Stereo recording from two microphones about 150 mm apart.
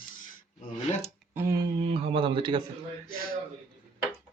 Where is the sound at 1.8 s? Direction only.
40° right (ahead or behind).